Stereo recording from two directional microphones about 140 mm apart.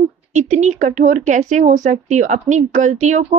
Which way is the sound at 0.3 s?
60° right (ahead or behind).